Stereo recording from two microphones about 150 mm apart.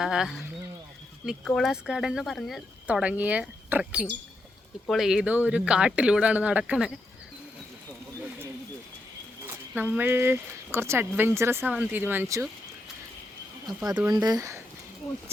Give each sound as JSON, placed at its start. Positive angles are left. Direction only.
{"t": 0.0, "sound": "speech", "side_deg": -5}
{"t": 9.5, "sound": "speech", "side_deg": -10}
{"t": 14.1, "sound": "speech", "side_deg": -25}